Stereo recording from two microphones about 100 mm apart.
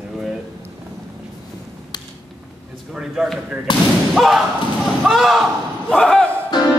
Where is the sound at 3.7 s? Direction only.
50° left (ahead or behind).